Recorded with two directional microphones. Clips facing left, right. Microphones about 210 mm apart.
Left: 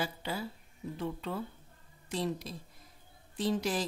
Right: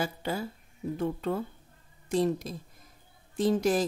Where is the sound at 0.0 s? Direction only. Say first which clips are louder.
Right 4 dB; 45° right (ahead or behind).